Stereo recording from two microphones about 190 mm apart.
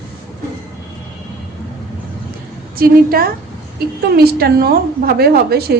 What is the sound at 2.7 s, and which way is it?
A woman's voice, 50° right (ahead or behind).